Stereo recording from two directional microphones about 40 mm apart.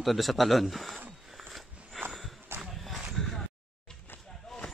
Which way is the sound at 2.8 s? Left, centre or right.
Centre.